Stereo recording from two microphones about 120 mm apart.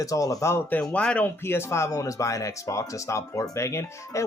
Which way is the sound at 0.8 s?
10° left (ahead or behind).